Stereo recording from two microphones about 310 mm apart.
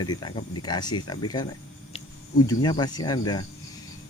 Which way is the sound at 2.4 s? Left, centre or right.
Centre.